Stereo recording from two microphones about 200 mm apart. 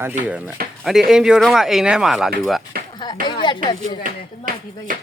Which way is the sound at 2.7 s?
50° right (ahead or behind).